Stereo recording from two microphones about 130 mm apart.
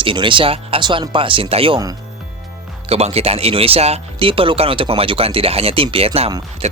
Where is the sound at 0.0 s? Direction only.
40° right (ahead or behind).